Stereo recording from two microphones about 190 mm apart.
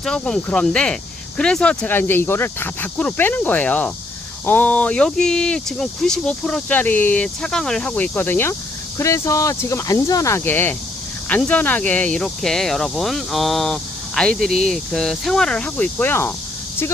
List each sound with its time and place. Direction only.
0.0 s speech: 5° left (ahead or behind)